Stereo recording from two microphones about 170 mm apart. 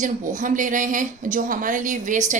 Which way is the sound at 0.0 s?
50° right (ahead or behind).